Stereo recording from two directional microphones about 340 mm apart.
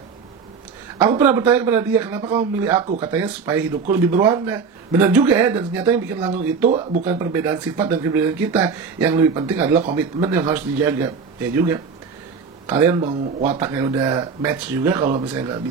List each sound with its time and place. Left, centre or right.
0.9 s speech: centre
6.7 s speech: right
7.1 s speech: centre